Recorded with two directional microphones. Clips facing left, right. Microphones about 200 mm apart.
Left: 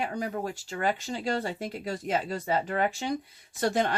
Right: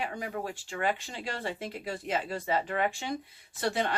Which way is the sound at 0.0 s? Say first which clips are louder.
Left 4 dB; 40° left (ahead or behind).